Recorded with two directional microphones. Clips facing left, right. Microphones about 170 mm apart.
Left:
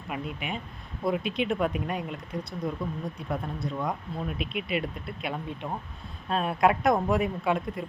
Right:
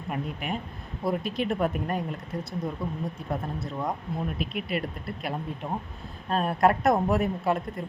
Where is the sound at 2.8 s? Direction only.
25° right (ahead or behind).